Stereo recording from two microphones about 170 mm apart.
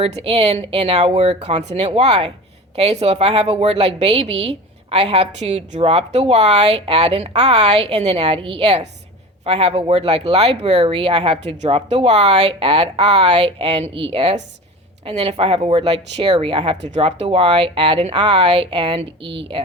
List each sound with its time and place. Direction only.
0.0 s a woman's voice: 35° right (ahead or behind)